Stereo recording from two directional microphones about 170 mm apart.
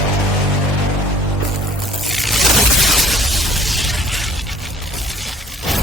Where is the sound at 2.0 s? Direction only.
Centre (ahead or behind).